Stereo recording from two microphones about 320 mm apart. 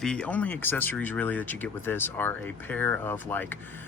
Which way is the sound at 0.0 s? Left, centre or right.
Centre.